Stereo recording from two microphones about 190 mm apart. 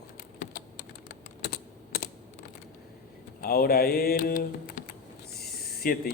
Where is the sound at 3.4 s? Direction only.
50° left (ahead or behind).